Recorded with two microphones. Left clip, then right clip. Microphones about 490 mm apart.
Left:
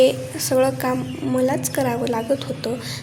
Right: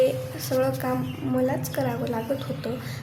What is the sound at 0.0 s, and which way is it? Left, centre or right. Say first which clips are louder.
A woman's voice: left 6 dB; right.